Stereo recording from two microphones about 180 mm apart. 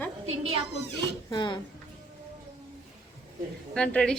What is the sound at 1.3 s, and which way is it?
Speech, 25° left (ahead or behind).